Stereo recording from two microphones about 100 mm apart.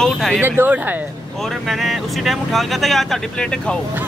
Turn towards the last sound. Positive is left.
turn(degrees=10)  # may be behind; listen again after turning